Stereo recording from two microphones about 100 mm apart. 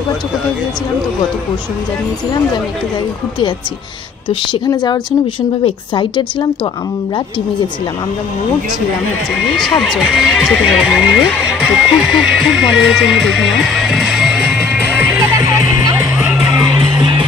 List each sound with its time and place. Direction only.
4.6 s a woman's voice: 45° left (ahead or behind)
9.8 s speech: 5° right (ahead or behind)
15.0 s music: 20° right (ahead or behind)
15.3 s music: 35° right (ahead or behind)
16.2 s music: 10° right (ahead or behind)